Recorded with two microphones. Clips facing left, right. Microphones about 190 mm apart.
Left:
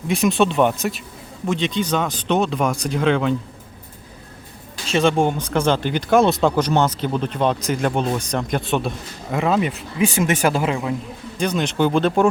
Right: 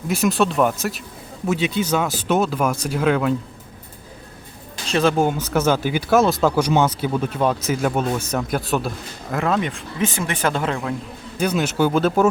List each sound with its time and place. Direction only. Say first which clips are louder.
0.1 s speech: left 1 dB; centre (ahead or behind)
4.9 s speech: even; centre (ahead or behind)
10.2 s a man's voice: left 4 dB; 15° left (ahead or behind)
10.5 s a man's voice: left 2 dB; 5° left (ahead or behind)
11.3 s speech: right 1 dB; 5° right (ahead or behind)